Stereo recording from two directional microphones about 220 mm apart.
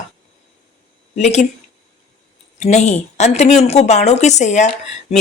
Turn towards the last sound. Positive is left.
turn(degrees=30)  # may be behind; listen again after turning